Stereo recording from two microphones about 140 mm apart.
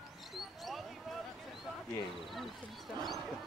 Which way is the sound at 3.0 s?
30° right (ahead or behind).